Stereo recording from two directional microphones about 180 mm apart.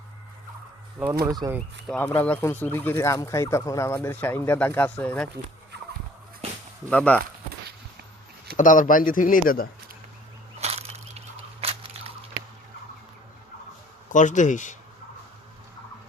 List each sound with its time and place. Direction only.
1.2 s speech: 20° right (ahead or behind)
2.1 s speech: 10° left (ahead or behind)
6.9 s speech: 10° left (ahead or behind)
8.5 s speech: 45° left (ahead or behind)
10.6 s a sound: 35° right (ahead or behind)
14.1 s speech: 45° left (ahead or behind)